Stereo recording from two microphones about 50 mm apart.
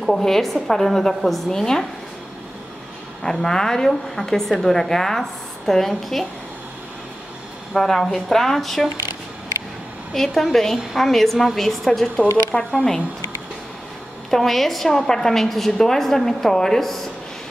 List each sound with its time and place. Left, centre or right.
0.0 s a woman's voice: centre
3.2 s a woman's voice: centre
7.7 s a woman's voice: centre
10.1 s a woman's voice: centre
14.3 s a woman's voice: centre